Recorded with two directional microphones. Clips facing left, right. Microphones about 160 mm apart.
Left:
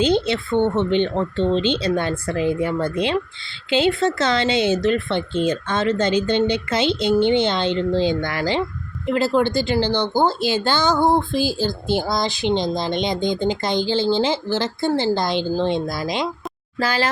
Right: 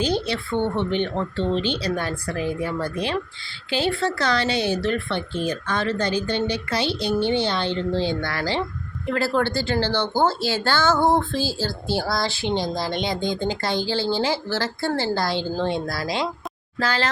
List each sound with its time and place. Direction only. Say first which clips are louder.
0.0 s speech: left 5 dB; 25° left (ahead or behind)